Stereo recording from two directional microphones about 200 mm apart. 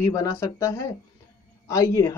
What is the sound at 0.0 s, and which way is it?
Speech, 15° left (ahead or behind).